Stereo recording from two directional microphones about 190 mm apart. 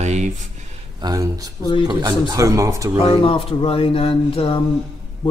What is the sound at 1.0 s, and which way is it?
Speech, 20° right (ahead or behind).